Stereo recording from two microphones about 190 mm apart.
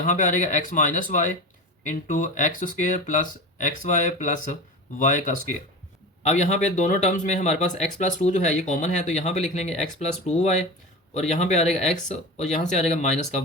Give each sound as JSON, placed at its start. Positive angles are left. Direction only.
{"t": 0.0, "sound": "speech", "side_deg": 40}